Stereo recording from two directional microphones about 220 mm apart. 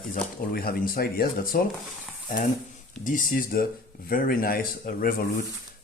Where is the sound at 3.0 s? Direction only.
40° left (ahead or behind).